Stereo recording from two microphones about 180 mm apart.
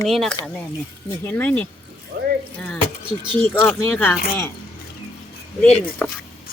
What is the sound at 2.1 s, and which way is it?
Water, 60° right (ahead or behind).